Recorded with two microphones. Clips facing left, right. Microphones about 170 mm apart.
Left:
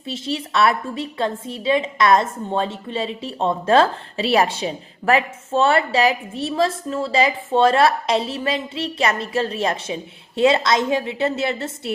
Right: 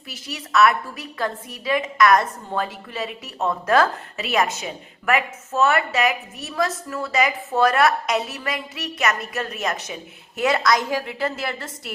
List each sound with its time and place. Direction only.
0.1 s a woman's voice: 30° left (ahead or behind)